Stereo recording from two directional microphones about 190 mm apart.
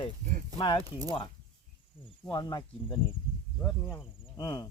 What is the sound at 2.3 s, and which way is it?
Speech, 20° left (ahead or behind).